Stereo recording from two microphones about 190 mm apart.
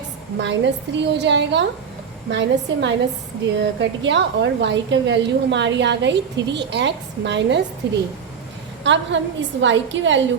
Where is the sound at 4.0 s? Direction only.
70° right (ahead or behind).